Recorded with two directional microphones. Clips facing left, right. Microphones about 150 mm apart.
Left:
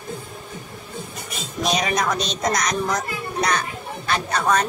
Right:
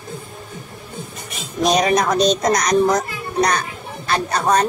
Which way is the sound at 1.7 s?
40° right (ahead or behind).